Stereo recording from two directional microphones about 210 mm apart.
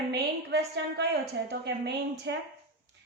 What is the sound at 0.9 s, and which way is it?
A woman's voice, 55° right (ahead or behind).